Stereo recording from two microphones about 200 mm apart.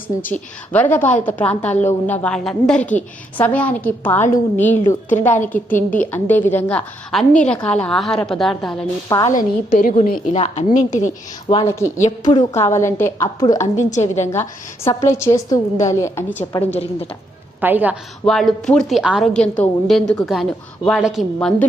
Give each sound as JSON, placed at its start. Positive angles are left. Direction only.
{"t": 0.3, "sound": "a woman's voice", "side_deg": 10}
{"t": 9.0, "sound": "a woman's voice", "side_deg": 15}
{"t": 9.3, "sound": "a woman's voice", "side_deg": 45}
{"t": 11.6, "sound": "a woman's voice", "side_deg": 15}
{"t": 13.2, "sound": "a woman's voice", "side_deg": 25}
{"t": 14.8, "sound": "a woman's voice", "side_deg": 15}
{"t": 17.6, "sound": "a woman's voice", "side_deg": -10}
{"t": 18.3, "sound": "a woman's voice", "side_deg": 0}